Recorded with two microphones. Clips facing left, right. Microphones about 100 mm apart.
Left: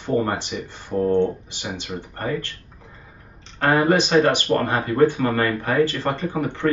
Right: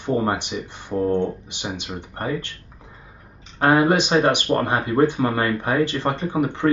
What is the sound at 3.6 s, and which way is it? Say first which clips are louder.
Speech: right 1 dB; 15° right (ahead or behind).